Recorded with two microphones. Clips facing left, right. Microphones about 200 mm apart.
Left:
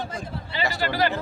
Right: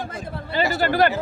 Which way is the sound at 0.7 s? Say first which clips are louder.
Right 5 dB; 50° right (ahead or behind).